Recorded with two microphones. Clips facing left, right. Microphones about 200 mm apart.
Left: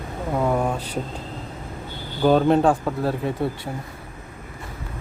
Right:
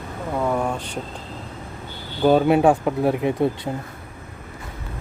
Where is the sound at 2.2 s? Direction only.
10° right (ahead or behind).